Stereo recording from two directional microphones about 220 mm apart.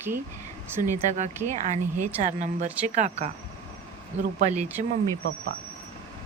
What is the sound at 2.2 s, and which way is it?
Speech, 30° right (ahead or behind).